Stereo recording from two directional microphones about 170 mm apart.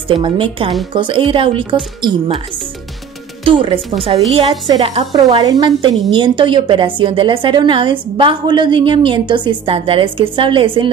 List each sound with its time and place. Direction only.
0.1 s a woman's voice: 30° right (ahead or behind)
3.4 s a woman's voice: 30° right (ahead or behind)